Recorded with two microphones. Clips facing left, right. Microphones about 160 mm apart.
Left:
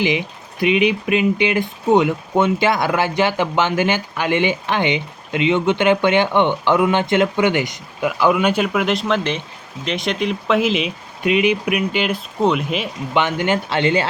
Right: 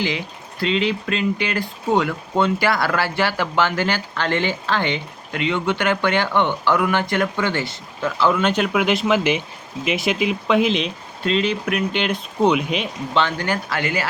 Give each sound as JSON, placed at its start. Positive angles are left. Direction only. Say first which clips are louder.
{"t": 0.0, "sound": "speech", "louder": "left 5 dB", "side_deg": 20}
{"t": 13.1, "sound": "speech", "louder": "left 3 dB", "side_deg": 20}